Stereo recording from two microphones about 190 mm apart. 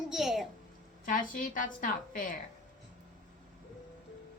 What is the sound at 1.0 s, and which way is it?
A woman's voice, 45° left (ahead or behind).